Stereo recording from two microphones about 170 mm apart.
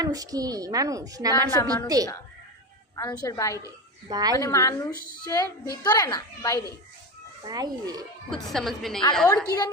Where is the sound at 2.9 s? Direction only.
20° left (ahead or behind).